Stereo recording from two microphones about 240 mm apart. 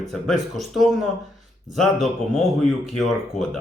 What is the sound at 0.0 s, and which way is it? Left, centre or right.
A man's voice, centre.